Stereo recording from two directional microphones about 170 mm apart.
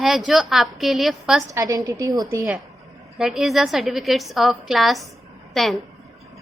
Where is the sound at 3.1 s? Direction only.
Centre (ahead or behind).